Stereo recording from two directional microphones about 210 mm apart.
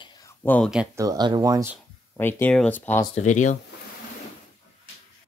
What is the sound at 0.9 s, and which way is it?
Speech, 15° right (ahead or behind).